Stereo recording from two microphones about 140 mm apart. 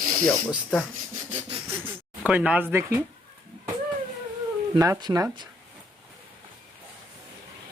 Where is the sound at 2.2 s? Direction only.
10° right (ahead or behind).